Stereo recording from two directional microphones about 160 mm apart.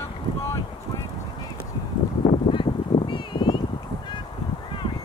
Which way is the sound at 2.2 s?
30° left (ahead or behind).